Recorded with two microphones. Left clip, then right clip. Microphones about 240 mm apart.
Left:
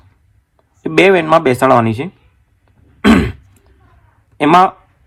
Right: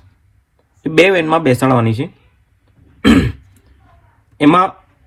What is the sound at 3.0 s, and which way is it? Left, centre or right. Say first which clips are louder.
Throat clearing: left 1 dB; left.